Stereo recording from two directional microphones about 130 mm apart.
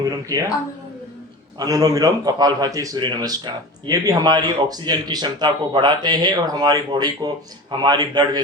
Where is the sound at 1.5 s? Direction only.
30° right (ahead or behind).